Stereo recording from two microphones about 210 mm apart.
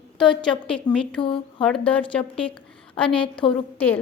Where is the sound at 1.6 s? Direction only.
5° left (ahead or behind).